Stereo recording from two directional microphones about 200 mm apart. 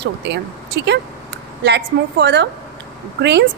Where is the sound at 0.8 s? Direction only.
60° right (ahead or behind).